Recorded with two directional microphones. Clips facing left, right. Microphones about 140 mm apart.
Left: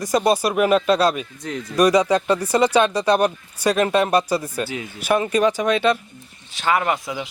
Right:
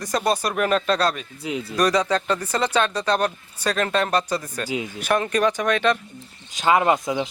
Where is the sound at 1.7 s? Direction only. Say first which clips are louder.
Left 5 dB; 10° left (ahead or behind).